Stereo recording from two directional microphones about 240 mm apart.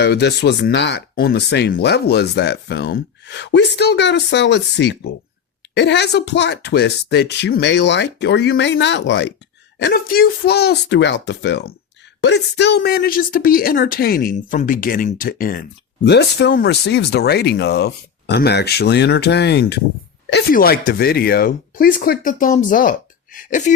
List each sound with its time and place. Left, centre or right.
0.0 s speech: left